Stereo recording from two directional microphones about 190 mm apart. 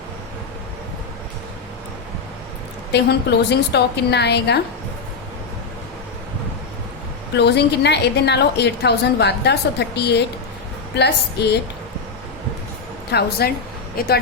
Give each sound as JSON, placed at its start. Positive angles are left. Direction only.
{"t": 2.9, "sound": "a woman's voice", "side_deg": 60}
{"t": 7.3, "sound": "a woman's voice", "side_deg": 60}
{"t": 13.1, "sound": "speech", "side_deg": 60}